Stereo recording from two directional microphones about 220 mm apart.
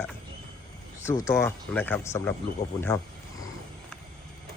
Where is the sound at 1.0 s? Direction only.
10° left (ahead or behind).